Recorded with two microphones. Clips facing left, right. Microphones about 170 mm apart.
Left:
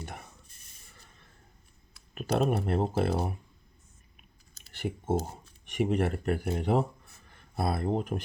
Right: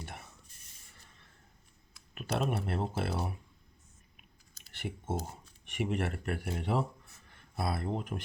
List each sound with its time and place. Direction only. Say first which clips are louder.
0.0 s a sound: left 4 dB; 45° left (ahead or behind)
1.9 s speech: left 5 dB; 35° left (ahead or behind)
4.7 s clicking: left 6 dB; 45° left (ahead or behind)
5.1 s speech: left 9 dB; 35° left (ahead or behind)
7.3 s a sound: left 4 dB; 45° left (ahead or behind)
7.8 s speech: left 6 dB; 40° left (ahead or behind)